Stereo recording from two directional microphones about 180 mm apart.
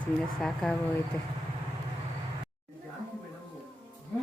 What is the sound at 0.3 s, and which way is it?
Speech, 5° left (ahead or behind).